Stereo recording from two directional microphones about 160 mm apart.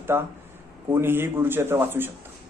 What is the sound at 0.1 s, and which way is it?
Speech, 15° right (ahead or behind).